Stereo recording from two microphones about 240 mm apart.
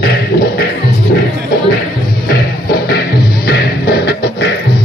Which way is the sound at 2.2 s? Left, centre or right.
Left.